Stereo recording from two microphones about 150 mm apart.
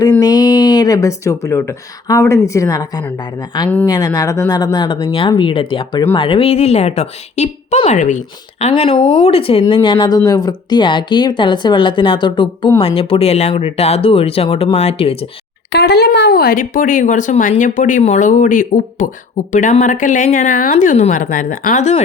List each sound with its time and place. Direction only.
0.2 s a woman's voice: 25° left (ahead or behind); by 8.2 s 55° left (ahead or behind)
8.6 s speech: 40° left (ahead or behind)
15.9 s speech: 90° left; by 22.0 s 50° left (ahead or behind)